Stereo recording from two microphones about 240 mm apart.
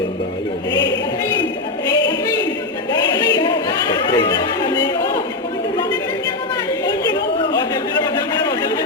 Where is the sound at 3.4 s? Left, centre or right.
Centre.